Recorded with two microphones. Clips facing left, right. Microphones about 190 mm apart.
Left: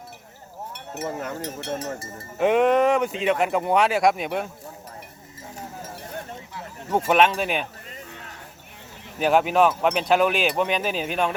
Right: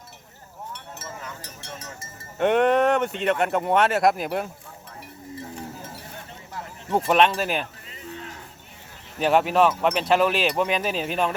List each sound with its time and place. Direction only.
1.0 s speech: 55° left (ahead or behind)
2.4 s speech: centre (ahead or behind)
7.1 s speech: centre (ahead or behind)
9.1 s speech: centre (ahead or behind)